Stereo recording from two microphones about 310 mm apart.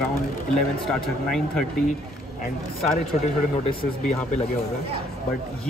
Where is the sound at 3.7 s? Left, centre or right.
Centre.